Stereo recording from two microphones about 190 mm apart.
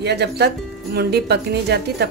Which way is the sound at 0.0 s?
60° right (ahead or behind).